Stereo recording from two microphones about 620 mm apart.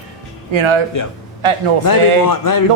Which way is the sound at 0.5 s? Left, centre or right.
Right.